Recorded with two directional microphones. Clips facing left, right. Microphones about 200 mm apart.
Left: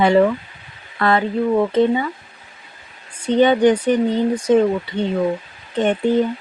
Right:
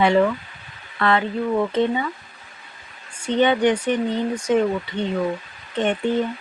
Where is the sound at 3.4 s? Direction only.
40° left (ahead or behind).